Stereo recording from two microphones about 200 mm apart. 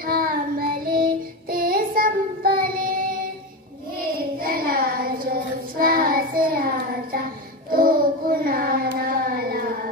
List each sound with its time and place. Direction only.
0.0 s child singing: 45° right (ahead or behind)
4.4 s child singing: 45° right (ahead or behind)